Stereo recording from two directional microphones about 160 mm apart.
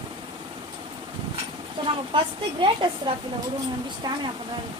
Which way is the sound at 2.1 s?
30° right (ahead or behind).